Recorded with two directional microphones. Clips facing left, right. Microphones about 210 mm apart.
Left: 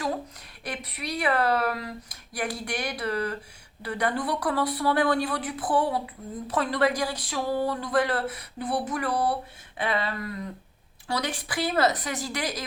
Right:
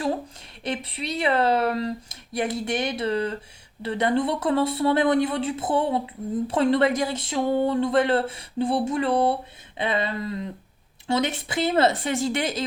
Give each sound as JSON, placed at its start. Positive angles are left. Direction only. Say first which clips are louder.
{"t": 0.6, "sound": "speech", "louder": "right 5 dB", "side_deg": -25}